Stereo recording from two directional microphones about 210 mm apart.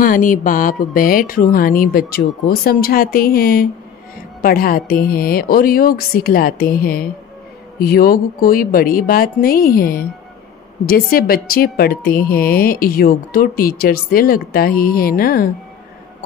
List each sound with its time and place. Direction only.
0.0 s a woman's voice: 40° left (ahead or behind)